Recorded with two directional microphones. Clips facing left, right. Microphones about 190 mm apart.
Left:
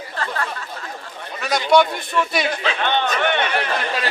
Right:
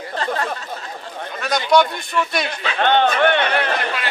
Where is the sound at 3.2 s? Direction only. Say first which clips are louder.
Right 3 dB; 55° right (ahead or behind).